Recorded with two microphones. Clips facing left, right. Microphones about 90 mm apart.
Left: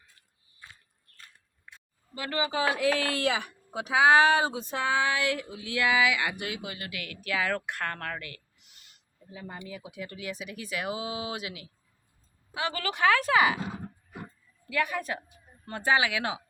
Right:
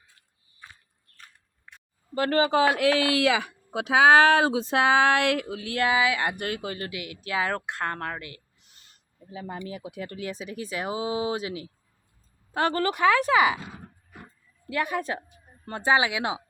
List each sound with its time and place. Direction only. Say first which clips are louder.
2.1 s speech: right 8 dB; 50° right (ahead or behind)
5.9 s speech: right 1 dB; 35° right (ahead or behind)
6.9 s speech: left 1 dB; 20° right (ahead or behind)
8.6 s owl: right 1 dB; 35° right (ahead or behind)
9.3 s speech: right 6 dB; 70° right (ahead or behind)
9.9 s speech: right 4 dB; 40° right (ahead or behind)
12.5 s speech: right 7 dB; 45° right (ahead or behind)
13.1 s speech: right 2 dB; 10° right (ahead or behind)
14.7 s a woman's voice: right 2 dB; 30° right (ahead or behind)